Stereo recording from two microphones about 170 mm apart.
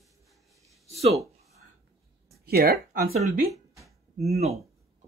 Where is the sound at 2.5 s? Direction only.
65° right (ahead or behind).